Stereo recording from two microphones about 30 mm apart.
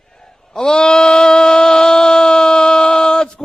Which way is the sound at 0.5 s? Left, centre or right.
Left.